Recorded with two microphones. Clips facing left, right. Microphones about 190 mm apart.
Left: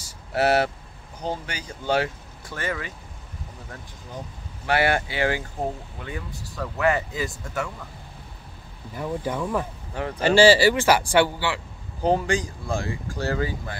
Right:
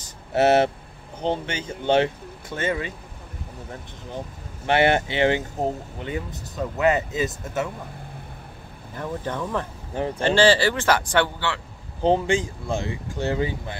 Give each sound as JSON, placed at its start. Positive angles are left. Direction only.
{"t": 0.3, "sound": "speech", "side_deg": -25}
{"t": 4.6, "sound": "speech", "side_deg": -25}
{"t": 8.9, "sound": "speech", "side_deg": 10}
{"t": 12.0, "sound": "speech", "side_deg": -25}